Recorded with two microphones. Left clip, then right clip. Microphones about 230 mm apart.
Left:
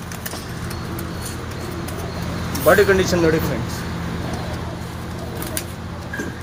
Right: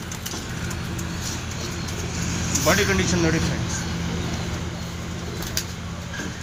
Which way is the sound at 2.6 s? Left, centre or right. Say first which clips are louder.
Left 7 dB; left.